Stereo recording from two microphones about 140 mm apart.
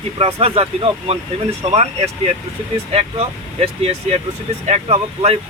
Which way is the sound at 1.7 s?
50° right (ahead or behind).